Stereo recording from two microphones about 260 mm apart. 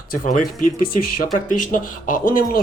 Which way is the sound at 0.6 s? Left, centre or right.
Left.